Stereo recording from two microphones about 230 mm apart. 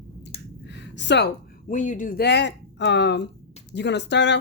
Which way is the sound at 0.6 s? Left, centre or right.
Left.